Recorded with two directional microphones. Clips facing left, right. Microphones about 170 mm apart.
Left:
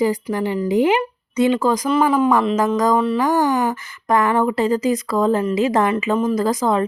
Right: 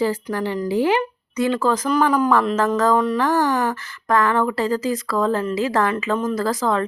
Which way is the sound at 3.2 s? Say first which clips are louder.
Left 2 dB; 15° left (ahead or behind).